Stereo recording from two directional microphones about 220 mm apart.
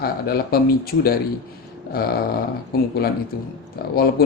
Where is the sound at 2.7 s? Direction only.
45° left (ahead or behind).